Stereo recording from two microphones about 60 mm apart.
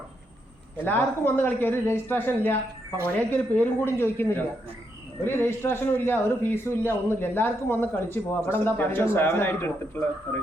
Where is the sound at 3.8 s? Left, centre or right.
Left.